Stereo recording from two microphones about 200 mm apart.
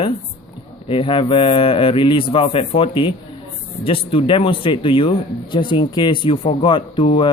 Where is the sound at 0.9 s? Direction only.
25° left (ahead or behind).